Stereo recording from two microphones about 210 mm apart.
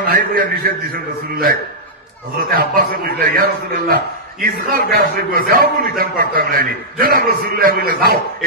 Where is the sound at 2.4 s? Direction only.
45° right (ahead or behind).